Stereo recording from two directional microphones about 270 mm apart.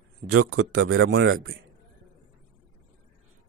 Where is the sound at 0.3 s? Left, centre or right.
Right.